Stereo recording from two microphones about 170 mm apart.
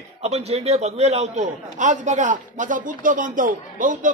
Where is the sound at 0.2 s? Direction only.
40° right (ahead or behind).